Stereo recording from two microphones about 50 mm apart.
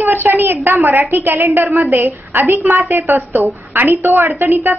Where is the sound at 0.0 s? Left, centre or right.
Right.